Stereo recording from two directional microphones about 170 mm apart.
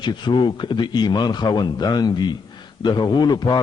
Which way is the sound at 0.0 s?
25° left (ahead or behind).